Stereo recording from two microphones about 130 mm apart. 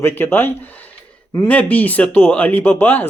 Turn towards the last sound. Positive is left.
turn(degrees=15)  # may be behind; listen again after turning